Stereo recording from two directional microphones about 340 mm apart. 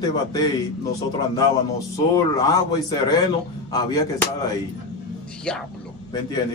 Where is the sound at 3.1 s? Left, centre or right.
Centre.